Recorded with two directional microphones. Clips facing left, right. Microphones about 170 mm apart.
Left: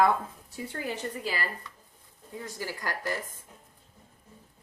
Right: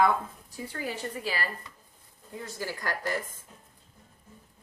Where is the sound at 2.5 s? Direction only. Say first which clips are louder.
Right 1 dB; 15° left (ahead or behind).